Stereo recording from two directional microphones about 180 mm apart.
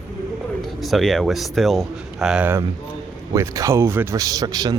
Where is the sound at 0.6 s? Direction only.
Centre (ahead or behind).